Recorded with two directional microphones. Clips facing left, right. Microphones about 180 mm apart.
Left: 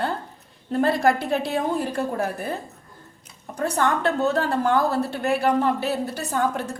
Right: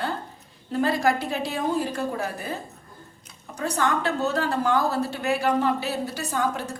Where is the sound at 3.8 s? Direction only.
55° left (ahead or behind).